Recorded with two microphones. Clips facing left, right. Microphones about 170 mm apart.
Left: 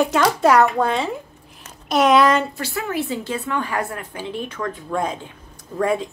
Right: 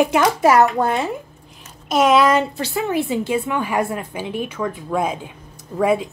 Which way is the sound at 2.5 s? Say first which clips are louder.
Right 4 dB; 20° right (ahead or behind).